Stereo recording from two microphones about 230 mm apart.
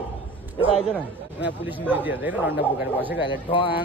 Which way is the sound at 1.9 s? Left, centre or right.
Centre.